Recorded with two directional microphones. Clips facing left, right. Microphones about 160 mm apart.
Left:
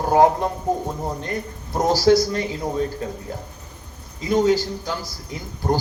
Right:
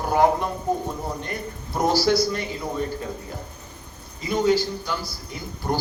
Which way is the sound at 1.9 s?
45° left (ahead or behind).